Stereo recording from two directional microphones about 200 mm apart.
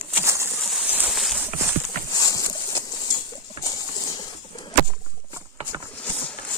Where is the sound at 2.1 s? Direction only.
20° left (ahead or behind).